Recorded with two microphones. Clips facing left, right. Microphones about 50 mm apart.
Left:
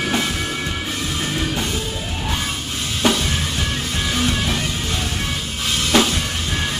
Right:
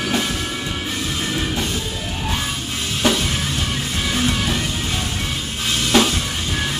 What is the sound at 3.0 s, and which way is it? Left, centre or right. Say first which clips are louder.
Music: even; centre.